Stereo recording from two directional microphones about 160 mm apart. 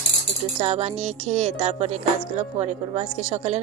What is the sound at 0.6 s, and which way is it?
Speech, 40° right (ahead or behind).